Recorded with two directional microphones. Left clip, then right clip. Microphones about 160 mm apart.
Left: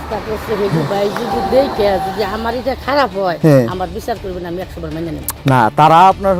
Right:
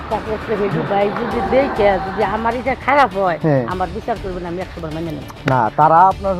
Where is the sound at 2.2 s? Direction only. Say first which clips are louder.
Even; 25° left (ahead or behind).